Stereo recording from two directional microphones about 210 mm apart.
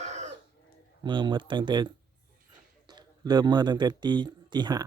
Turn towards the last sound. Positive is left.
turn(degrees=-20)  # may be behind; listen again after turning